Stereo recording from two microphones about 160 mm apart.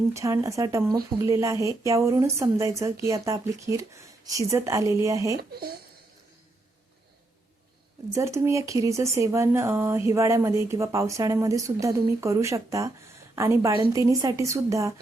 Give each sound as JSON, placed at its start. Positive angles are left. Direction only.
{"t": 0.1, "sound": "speech", "side_deg": -20}
{"t": 5.4, "sound": "speech", "side_deg": -75}
{"t": 8.1, "sound": "speech", "side_deg": -15}